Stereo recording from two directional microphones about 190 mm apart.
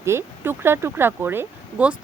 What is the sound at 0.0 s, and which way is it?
A woman's voice, 15° right (ahead or behind).